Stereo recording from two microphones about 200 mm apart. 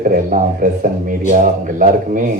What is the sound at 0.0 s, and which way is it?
A man's voice, 40° right (ahead or behind).